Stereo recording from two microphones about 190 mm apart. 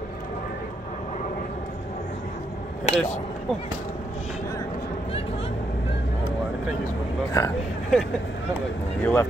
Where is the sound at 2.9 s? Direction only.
40° left (ahead or behind).